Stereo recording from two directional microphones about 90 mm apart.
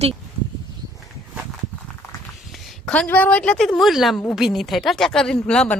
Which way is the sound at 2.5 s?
10° left (ahead or behind).